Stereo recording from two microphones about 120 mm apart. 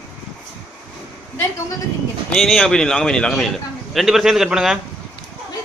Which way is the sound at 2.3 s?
5° left (ahead or behind).